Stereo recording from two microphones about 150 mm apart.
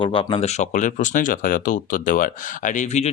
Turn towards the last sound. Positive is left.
turn(degrees=50)  # may be behind; listen again after turning